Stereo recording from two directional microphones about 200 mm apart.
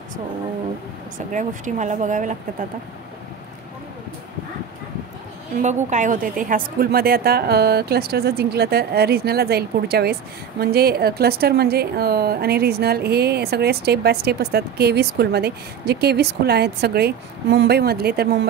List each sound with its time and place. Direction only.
1.1 s speech: 40° right (ahead or behind)
5.6 s a woman's voice: 35° right (ahead or behind); by 18.5 s 55° right (ahead or behind)